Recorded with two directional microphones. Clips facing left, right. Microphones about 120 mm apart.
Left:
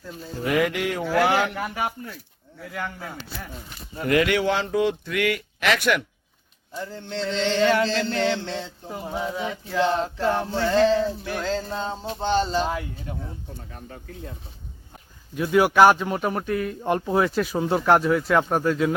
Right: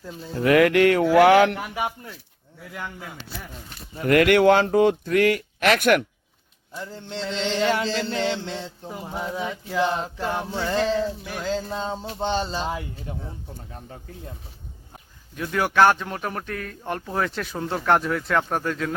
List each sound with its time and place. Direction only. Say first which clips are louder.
0.3 s music: right 6 dB; 65° right (ahead or behind)
4.0 s speech: right 5 dB; 55° right (ahead or behind)
7.1 s chant: left 2 dB; 15° right (ahead or behind)
9.7 s a sound: left 2 dB; 10° right (ahead or behind)
12.5 s chant: left 4 dB; 20° right (ahead or behind)
15.4 s a man's voice: left 3 dB; 5° left (ahead or behind)
16.8 s a man's voice: left 4 dB; 15° left (ahead or behind)